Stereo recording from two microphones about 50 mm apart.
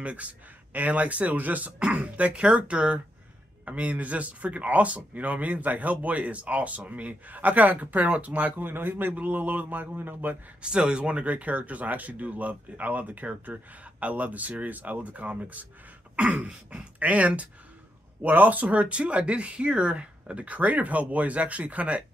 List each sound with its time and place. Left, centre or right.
0.0 s speech: right
10.6 s speech: centre